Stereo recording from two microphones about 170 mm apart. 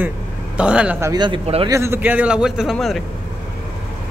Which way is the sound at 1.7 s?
15° right (ahead or behind).